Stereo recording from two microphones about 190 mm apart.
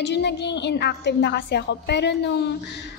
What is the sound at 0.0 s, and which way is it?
A woman's voice, 65° left (ahead or behind).